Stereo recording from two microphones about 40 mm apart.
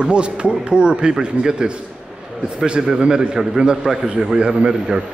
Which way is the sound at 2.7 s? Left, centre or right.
Centre.